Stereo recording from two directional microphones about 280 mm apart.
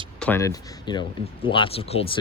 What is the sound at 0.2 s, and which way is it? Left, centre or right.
Speech, centre.